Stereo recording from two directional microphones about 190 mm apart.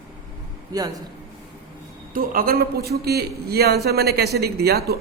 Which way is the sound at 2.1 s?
50° right (ahead or behind).